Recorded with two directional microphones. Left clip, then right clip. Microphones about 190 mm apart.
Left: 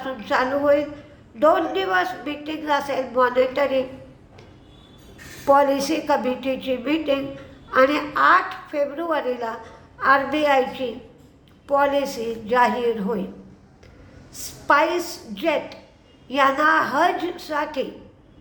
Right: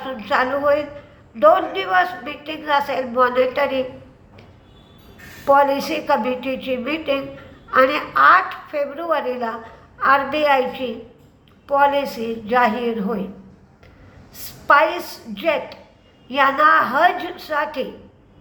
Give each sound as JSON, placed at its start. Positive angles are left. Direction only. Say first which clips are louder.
{"t": 0.0, "sound": "a woman's voice", "louder": "right 2 dB", "side_deg": 15}
{"t": 5.5, "sound": "a woman's voice", "louder": "right 2 dB", "side_deg": 15}
{"t": 14.3, "sound": "a woman's voice", "louder": "right 4 dB", "side_deg": 15}